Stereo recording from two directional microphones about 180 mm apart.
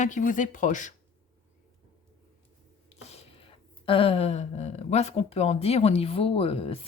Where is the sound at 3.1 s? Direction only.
30° left (ahead or behind).